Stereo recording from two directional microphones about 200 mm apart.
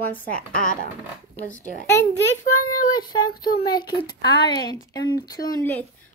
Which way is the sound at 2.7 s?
20° left (ahead or behind).